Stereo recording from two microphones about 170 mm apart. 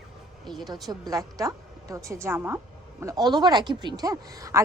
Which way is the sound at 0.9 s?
20° right (ahead or behind).